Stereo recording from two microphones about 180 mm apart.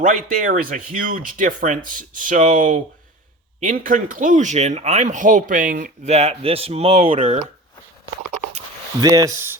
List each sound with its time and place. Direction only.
0.0 s speech: 50° right (ahead or behind)
9.0 s speech: 20° right (ahead or behind)